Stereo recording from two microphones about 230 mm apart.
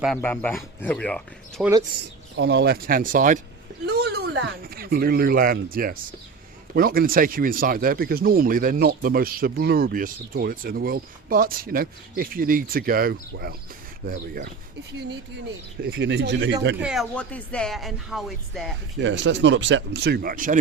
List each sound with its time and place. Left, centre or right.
0.0 s speech: centre
2.3 s speech: right
3.8 s a sound: right
4.6 s speech: right
15.8 s speech: right
16.8 s speech: centre
18.9 s speech: right